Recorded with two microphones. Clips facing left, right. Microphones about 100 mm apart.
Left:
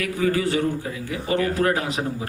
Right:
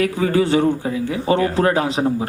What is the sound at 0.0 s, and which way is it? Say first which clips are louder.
A man's voice: right 5 dB; 30° right (ahead or behind).